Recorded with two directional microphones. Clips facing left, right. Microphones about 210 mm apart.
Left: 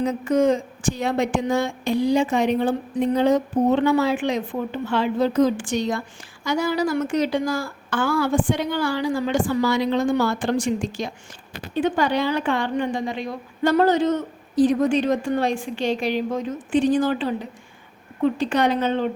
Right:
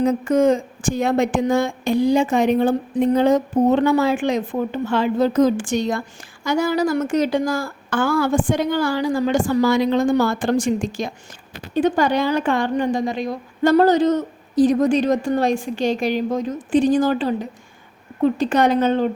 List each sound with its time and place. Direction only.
0.0 s a woman's voice: 45° right (ahead or behind)